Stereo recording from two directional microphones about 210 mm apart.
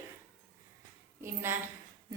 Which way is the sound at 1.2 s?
10° right (ahead or behind).